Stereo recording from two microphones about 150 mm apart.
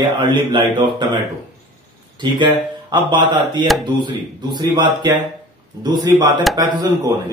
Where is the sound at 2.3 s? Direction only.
30° right (ahead or behind).